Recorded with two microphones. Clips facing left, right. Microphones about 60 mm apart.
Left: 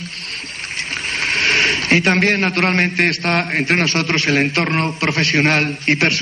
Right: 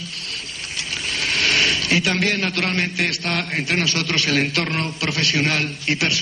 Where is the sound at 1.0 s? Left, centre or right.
Left.